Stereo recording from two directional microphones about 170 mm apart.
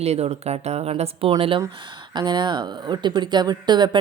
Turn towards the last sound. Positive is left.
turn(degrees=-25)  # may be behind; listen again after turning